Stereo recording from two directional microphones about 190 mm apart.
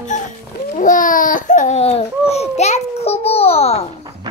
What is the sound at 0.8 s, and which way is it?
Babbling, 45° left (ahead or behind).